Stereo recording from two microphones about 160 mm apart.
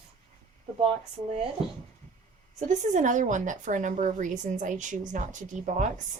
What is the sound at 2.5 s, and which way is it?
A woman's voice, 50° right (ahead or behind).